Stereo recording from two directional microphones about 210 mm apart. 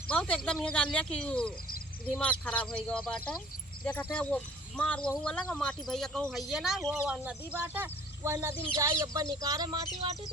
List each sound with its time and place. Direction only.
0.1 s speech: 5° left (ahead or behind); by 10.2 s 25° right (ahead or behind)